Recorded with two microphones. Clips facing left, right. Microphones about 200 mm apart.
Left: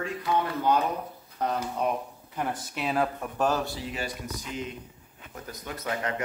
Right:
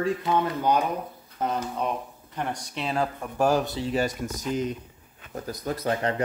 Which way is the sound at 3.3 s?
10° right (ahead or behind).